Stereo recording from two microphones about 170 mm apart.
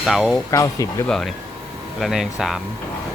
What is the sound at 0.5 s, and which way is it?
Speech, 20° left (ahead or behind).